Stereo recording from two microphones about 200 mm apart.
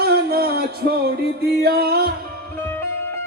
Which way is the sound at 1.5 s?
50° right (ahead or behind).